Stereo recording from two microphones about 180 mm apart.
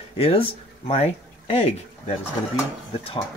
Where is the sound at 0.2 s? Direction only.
35° left (ahead or behind).